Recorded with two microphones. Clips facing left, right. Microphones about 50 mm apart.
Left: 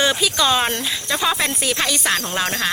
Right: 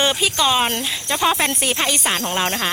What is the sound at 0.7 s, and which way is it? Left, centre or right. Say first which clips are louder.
Speech: even; right.